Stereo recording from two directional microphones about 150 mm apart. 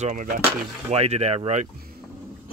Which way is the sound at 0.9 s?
45° right (ahead or behind).